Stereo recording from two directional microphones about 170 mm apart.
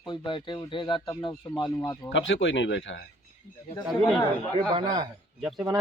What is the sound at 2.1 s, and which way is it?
Speech, 90° left.